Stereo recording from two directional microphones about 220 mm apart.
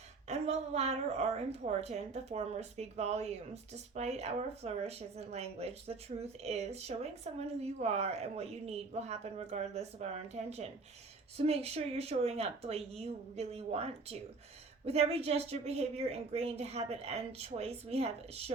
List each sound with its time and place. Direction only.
0.3 s a woman's voice: 30° right (ahead or behind)